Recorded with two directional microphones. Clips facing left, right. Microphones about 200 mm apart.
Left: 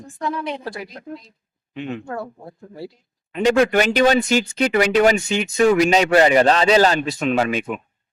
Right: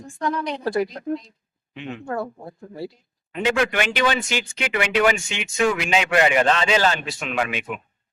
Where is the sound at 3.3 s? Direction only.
40° left (ahead or behind).